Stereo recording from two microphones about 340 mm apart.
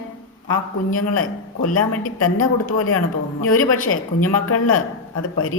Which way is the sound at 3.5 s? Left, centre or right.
Left.